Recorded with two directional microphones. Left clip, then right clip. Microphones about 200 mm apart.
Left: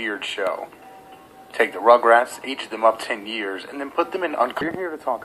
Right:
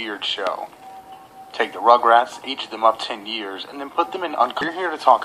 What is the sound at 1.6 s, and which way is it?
Speech, 40° left (ahead or behind).